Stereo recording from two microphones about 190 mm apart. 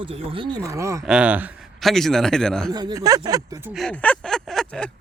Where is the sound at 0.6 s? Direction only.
15° right (ahead or behind); by 2.7 s 5° left (ahead or behind).